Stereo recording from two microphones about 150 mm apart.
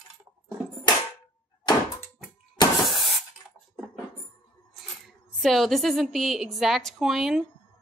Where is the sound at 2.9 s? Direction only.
Centre (ahead or behind).